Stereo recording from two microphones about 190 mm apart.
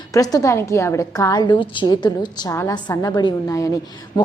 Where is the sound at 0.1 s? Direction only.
20° left (ahead or behind).